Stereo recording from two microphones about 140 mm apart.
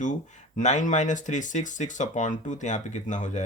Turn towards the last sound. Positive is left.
turn(degrees=60)  # may be behind; listen again after turning